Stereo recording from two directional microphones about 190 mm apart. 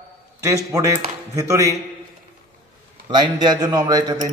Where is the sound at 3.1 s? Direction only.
25° right (ahead or behind).